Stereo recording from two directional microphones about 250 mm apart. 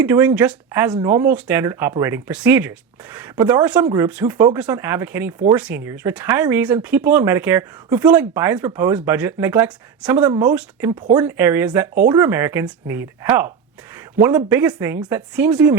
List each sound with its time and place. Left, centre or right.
0.0 s speech: centre